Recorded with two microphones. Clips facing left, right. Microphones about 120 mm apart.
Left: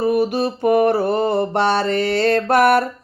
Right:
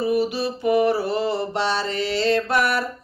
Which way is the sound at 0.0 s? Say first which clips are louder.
Left 4 dB; 50° left (ahead or behind).